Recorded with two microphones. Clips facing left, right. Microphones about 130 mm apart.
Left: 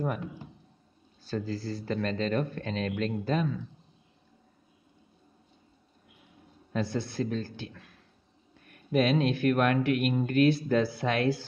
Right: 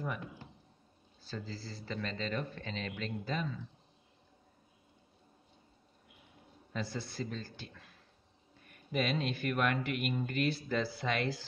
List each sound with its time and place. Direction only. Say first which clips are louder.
1.3 s speech: left 10 dB; 55° left (ahead or behind)
6.7 s speech: left 8 dB; 65° left (ahead or behind)